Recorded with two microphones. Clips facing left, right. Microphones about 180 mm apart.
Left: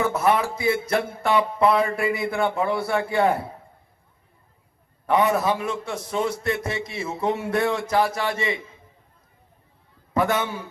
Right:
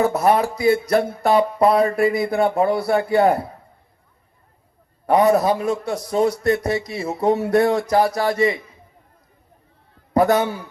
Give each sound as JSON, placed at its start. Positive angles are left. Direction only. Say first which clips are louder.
{"t": 0.0, "sound": "a man's voice", "louder": "right 4 dB", "side_deg": -40}
{"t": 5.0, "sound": "a man's voice", "louder": "right 5 dB", "side_deg": -40}
{"t": 10.2, "sound": "a man's voice", "louder": "right 6 dB", "side_deg": -35}